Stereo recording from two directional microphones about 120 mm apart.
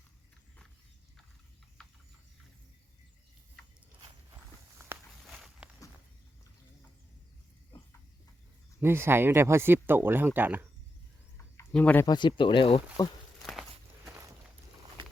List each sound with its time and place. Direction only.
1.8 s a sound: 5° left (ahead or behind)
5.2 s walk: centre (ahead or behind)
8.8 s speech: 20° right (ahead or behind)
11.7 s speech: 10° left (ahead or behind)
12.0 s speech: 40° left (ahead or behind)
13.4 s walk: centre (ahead or behind)